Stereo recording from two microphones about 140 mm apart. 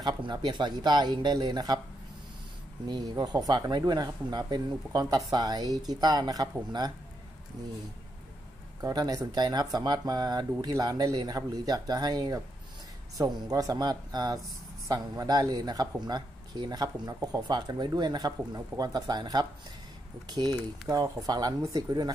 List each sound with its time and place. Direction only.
0.0 s speech: 35° right (ahead or behind)
2.9 s speech: 30° right (ahead or behind)
8.8 s speech: 30° right (ahead or behind)